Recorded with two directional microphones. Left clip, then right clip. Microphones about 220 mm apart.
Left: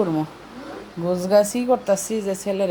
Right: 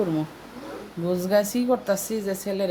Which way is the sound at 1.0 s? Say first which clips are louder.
Left 5 dB; centre (ahead or behind).